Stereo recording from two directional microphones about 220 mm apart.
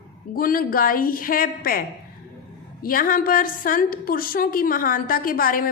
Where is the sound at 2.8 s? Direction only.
40° left (ahead or behind).